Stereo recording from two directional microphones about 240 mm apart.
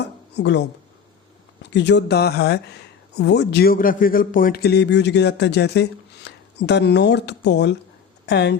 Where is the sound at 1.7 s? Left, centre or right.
Left.